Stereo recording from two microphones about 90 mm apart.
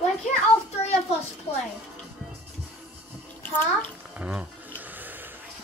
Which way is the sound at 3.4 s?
20° left (ahead or behind).